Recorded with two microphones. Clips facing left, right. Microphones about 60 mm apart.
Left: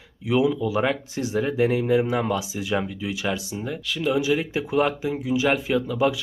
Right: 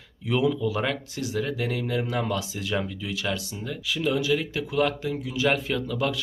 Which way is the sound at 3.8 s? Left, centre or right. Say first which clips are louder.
Even; centre.